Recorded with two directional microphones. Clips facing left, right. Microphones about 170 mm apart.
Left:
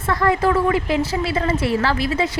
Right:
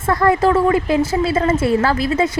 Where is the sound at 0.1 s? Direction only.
45° right (ahead or behind).